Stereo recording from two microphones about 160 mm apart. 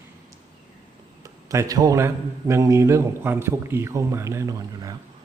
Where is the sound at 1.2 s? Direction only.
20° right (ahead or behind).